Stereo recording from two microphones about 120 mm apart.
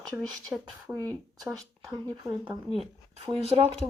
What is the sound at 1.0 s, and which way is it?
Speech, 30° right (ahead or behind).